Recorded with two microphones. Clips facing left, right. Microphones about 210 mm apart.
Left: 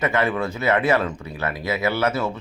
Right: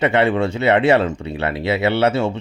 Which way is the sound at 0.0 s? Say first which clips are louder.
Right 6 dB; 30° right (ahead or behind).